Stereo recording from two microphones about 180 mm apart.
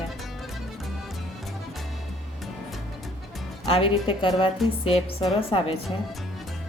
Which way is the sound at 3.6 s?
30° left (ahead or behind).